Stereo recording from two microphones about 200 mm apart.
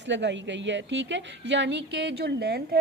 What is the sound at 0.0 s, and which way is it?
A woman's voice, 60° right (ahead or behind).